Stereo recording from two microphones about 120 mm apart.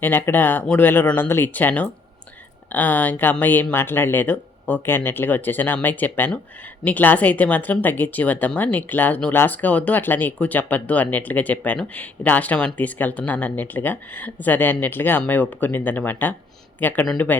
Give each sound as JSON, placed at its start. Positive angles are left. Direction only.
{"t": 0.0, "sound": "speech", "side_deg": 15}